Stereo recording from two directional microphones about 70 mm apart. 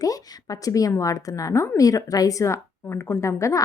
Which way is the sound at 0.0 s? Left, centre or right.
Left.